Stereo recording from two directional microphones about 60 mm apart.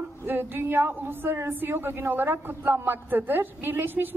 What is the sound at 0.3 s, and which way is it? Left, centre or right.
A woman's voice, right.